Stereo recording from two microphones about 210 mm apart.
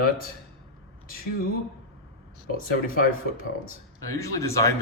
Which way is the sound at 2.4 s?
45° left (ahead or behind).